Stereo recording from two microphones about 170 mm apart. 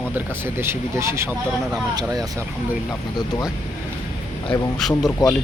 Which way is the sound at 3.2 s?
25° left (ahead or behind).